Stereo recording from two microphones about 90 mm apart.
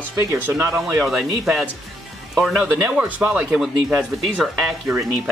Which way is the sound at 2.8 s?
15° right (ahead or behind).